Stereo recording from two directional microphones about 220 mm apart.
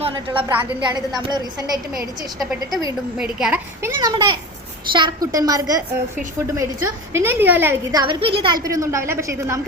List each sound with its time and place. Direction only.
0.3 s a woman's voice: 10° right (ahead or behind)
0.9 s a woman's voice: 20° right (ahead or behind)
2.4 s a woman's voice: centre (ahead or behind)